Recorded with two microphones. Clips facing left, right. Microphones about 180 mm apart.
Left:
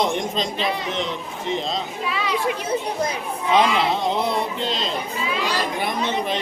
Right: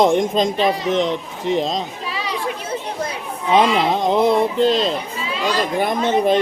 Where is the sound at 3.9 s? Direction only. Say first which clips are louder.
Right 6 dB; 50° right (ahead or behind).